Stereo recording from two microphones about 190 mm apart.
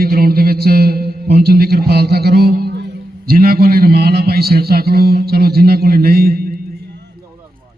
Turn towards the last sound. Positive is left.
turn(degrees=-50)  # may be behind; listen again after turning